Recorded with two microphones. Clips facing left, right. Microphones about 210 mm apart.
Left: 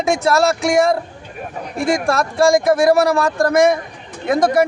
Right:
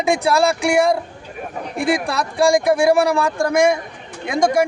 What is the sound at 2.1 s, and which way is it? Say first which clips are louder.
A man's voice: left 3 dB; 15° right (ahead or behind).